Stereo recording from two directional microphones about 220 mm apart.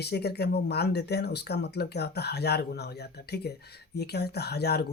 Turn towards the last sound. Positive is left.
turn(degrees=45)  # may be behind; listen again after turning